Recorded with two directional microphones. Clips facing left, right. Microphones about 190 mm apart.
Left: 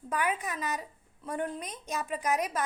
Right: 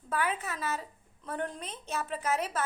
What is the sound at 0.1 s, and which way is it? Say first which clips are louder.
A woman's voice: left 1 dB; 15° left (ahead or behind).